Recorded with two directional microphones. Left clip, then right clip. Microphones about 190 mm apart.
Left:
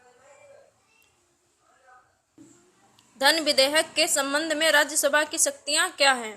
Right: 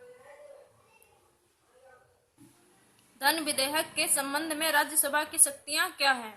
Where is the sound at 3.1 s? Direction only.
35° left (ahead or behind).